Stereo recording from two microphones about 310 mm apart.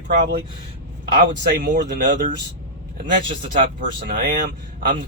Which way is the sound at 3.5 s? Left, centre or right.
Right.